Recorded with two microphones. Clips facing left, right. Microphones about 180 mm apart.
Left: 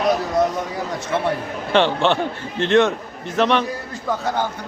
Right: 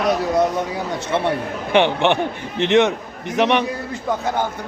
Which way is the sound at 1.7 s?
15° right (ahead or behind).